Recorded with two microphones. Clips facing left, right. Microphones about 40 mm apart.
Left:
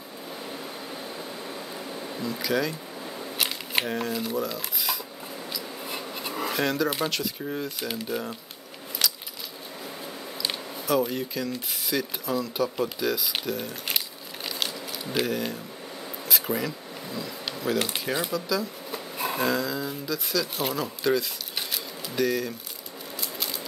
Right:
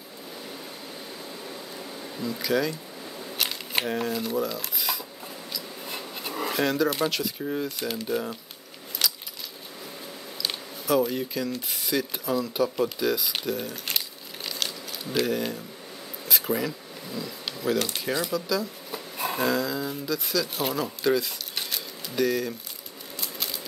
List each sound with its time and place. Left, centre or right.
1.5 s a sound: centre
5.5 s scissors: centre
6.9 s speech: centre
9.0 s coin: centre
10.9 s speech: centre
16.3 s a sound: centre
17.7 s speech: centre
18.3 s speech: centre